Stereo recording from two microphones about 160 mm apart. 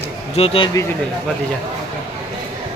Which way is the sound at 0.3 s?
35° left (ahead or behind).